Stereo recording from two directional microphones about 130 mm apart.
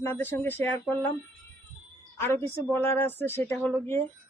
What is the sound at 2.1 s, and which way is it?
A woman's voice, 20° left (ahead or behind).